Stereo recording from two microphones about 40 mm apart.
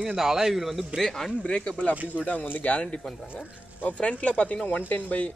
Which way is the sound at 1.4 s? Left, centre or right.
Left.